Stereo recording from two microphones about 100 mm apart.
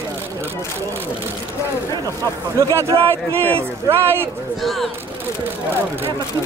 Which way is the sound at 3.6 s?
25° right (ahead or behind).